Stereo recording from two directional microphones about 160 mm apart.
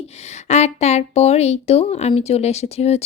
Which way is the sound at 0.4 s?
45° left (ahead or behind).